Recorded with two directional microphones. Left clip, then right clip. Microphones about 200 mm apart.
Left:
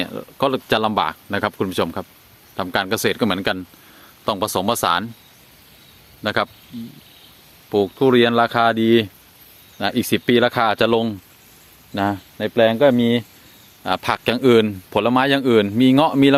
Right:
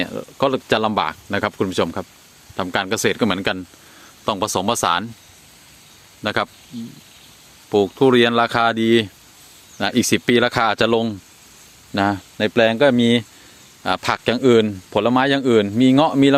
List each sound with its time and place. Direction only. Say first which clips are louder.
0.0 s speech: right 1 dB; 10° right (ahead or behind)
6.2 s speech: left 1 dB; 5° right (ahead or behind)
7.7 s speech: right 1 dB; 10° right (ahead or behind)
11.9 s speech: right 3 dB; 20° right (ahead or behind)
13.8 s speech: even; 10° right (ahead or behind)